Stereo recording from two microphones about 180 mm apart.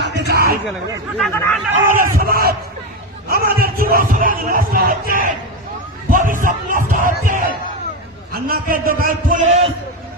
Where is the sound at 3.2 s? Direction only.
55° right (ahead or behind).